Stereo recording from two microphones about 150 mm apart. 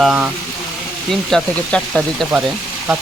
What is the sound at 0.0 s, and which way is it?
Speech, 10° right (ahead or behind).